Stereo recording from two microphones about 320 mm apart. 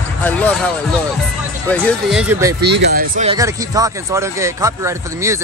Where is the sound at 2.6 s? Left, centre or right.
Right.